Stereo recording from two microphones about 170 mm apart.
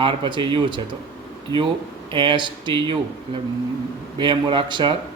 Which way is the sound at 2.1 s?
30° right (ahead or behind).